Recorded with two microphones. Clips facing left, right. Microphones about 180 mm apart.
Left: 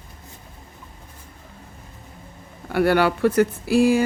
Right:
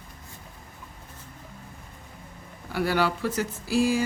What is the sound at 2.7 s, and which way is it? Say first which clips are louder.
Speech: left 7 dB; 60° left (ahead or behind).